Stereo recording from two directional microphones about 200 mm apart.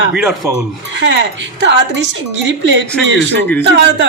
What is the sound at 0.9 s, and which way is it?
Speech, 65° right (ahead or behind).